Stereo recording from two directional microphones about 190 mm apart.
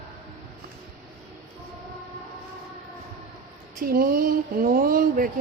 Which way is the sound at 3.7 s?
50° right (ahead or behind).